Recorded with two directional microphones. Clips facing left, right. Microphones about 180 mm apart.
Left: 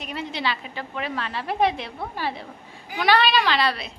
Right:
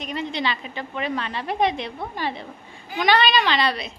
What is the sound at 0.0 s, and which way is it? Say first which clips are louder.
A woman's voice: right 2 dB; 5° left (ahead or behind).